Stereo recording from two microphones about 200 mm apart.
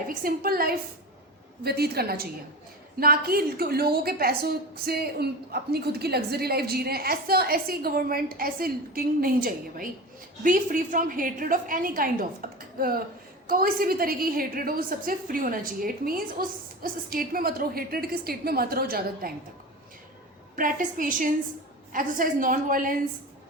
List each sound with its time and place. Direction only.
0.1 s a woman's voice: 45° right (ahead or behind)
20.6 s a woman's voice: 45° right (ahead or behind)